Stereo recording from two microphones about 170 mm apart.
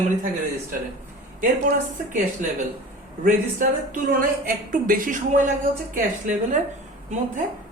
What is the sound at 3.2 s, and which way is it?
Speech, 50° right (ahead or behind).